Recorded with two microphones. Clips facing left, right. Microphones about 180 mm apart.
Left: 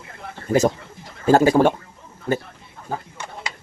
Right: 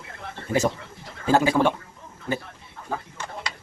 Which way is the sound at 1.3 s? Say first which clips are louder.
Left 5 dB; 45° left (ahead or behind).